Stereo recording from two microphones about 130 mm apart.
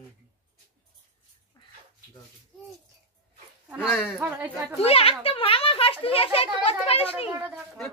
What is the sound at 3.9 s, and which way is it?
Speech, centre (ahead or behind).